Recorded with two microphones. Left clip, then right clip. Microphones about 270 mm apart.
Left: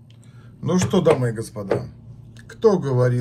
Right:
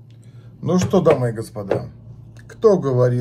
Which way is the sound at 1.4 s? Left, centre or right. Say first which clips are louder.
Right 2 dB; centre.